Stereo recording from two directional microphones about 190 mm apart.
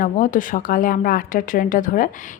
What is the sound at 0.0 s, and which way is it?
A woman's voice, 45° left (ahead or behind).